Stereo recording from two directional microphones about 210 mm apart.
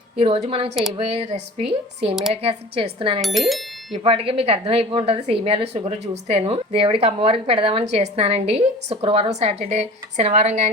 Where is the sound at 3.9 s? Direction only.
25° right (ahead or behind).